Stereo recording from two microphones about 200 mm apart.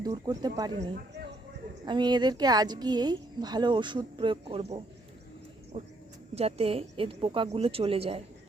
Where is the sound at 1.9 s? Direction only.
20° right (ahead or behind).